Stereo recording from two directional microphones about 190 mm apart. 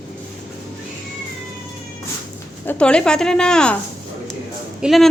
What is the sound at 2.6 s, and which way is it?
A woman's voice, 10° left (ahead or behind).